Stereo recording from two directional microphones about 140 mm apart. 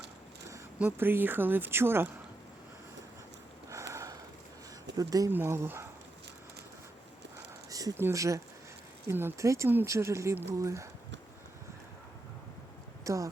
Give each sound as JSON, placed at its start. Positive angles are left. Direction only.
{"t": 0.8, "sound": "a woman's voice", "side_deg": -15}
{"t": 3.7, "sound": "a sound", "side_deg": -20}
{"t": 4.9, "sound": "a woman's voice", "side_deg": -25}
{"t": 7.3, "sound": "a sound", "side_deg": -25}
{"t": 9.0, "sound": "speech", "side_deg": -20}
{"t": 13.1, "sound": "a woman's voice", "side_deg": -25}